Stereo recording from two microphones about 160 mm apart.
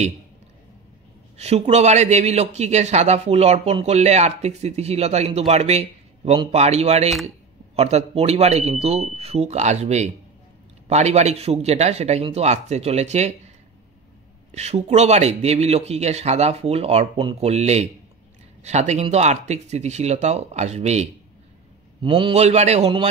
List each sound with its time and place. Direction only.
1.4 s a man's voice: 40° right (ahead or behind)
7.1 s speech: centre (ahead or behind)
7.7 s a man's voice: 40° right (ahead or behind)
14.5 s a man's voice: 45° right (ahead or behind)
22.0 s speech: 35° right (ahead or behind)